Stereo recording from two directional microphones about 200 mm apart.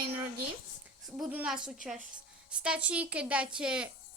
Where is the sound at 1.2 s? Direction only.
5° right (ahead or behind).